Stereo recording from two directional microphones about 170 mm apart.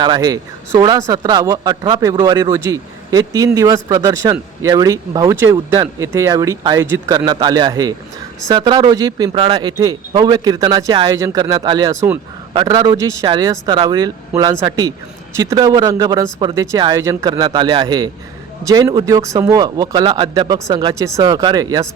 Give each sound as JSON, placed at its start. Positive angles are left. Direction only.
{"t": 0.0, "sound": "speech", "side_deg": -25}
{"t": 12.5, "sound": "speech", "side_deg": -25}